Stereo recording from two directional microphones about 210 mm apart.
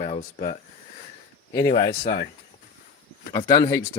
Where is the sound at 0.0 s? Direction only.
25° left (ahead or behind).